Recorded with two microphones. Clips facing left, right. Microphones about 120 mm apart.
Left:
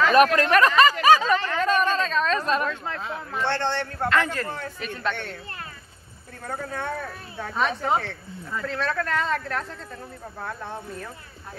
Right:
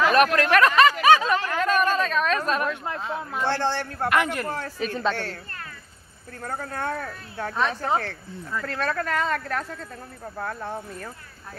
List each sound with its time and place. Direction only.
0.0 s a sound: centre (ahead or behind)
3.2 s a man's voice: 10° right (ahead or behind)
4.1 s a man's voice: 15° right (ahead or behind)
4.6 s speech: 5° right (ahead or behind)
6.5 s speech: centre (ahead or behind)